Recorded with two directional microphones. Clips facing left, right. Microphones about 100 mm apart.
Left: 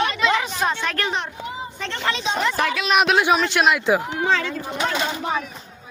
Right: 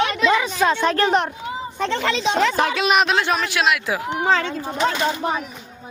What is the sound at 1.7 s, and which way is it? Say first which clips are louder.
Speech: right 6 dB; 65° right (ahead or behind).